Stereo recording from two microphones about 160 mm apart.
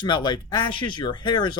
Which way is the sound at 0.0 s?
25° left (ahead or behind).